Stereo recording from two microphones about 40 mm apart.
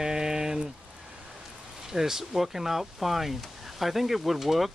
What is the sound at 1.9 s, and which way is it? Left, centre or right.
Speech, centre.